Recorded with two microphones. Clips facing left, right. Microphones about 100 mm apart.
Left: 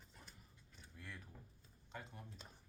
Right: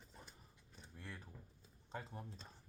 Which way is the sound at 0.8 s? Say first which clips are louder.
Right 2 dB; 30° right (ahead or behind).